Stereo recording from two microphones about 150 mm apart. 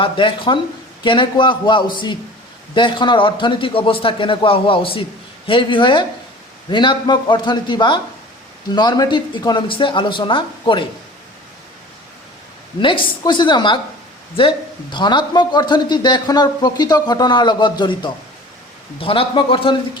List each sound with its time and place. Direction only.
0.0 s a man's voice: 35° left (ahead or behind)
12.8 s a man's voice: 35° left (ahead or behind)